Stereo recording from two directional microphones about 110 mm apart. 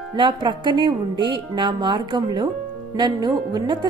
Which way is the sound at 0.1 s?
45° right (ahead or behind).